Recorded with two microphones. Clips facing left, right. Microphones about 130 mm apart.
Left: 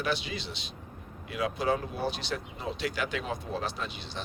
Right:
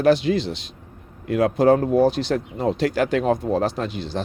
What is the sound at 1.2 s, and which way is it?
Speech, 50° right (ahead or behind).